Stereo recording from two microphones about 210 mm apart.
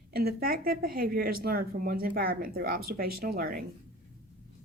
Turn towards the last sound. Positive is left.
turn(degrees=-45)  # may be behind; listen again after turning